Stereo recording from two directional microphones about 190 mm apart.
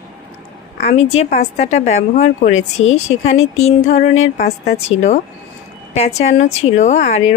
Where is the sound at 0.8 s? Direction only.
35° left (ahead or behind).